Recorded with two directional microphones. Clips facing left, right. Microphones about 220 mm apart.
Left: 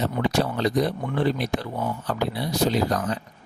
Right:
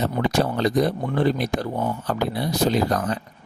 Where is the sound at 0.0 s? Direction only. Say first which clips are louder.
Right 2 dB; 45° right (ahead or behind).